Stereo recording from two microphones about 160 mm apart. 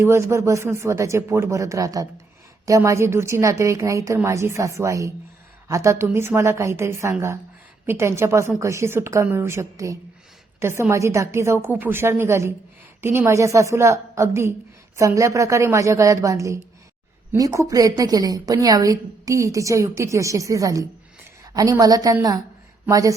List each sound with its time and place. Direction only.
0.0 s a woman's voice: 15° right (ahead or behind)